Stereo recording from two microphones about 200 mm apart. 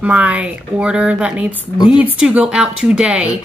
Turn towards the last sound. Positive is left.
turn(degrees=-5)  # may be behind; listen again after turning